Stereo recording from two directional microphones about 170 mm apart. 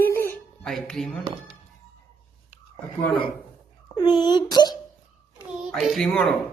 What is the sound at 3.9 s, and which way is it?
Speech, 25° left (ahead or behind).